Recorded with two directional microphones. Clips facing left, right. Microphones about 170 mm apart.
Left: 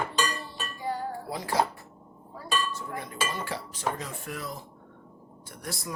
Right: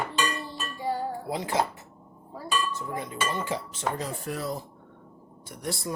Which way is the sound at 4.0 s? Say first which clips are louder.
Right 5 dB; 35° right (ahead or behind).